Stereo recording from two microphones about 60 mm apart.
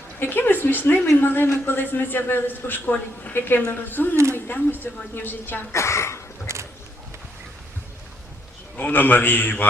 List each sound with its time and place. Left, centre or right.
0.2 s a man's voice: left
5.7 s speech: left
6.5 s a sound: right
8.9 s a man's voice: left